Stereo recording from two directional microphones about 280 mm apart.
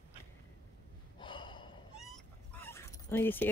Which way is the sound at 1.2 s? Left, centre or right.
Centre.